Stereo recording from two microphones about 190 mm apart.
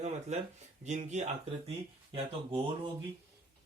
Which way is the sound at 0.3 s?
35° right (ahead or behind).